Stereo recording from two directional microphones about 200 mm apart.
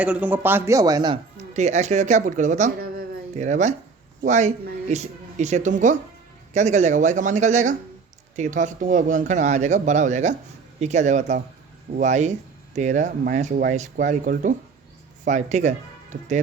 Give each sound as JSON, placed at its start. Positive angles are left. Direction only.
{"t": 0.0, "sound": "speech", "side_deg": -5}
{"t": 1.5, "sound": "speech", "side_deg": -35}